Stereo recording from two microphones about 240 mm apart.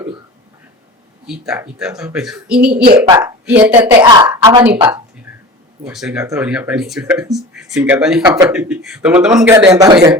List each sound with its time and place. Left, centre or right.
1.3 s speech: centre
4.0 s speech: centre
5.8 s speech: centre
9.7 s speech: centre